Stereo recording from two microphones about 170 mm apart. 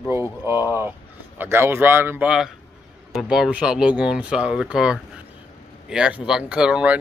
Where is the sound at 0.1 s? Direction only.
15° right (ahead or behind).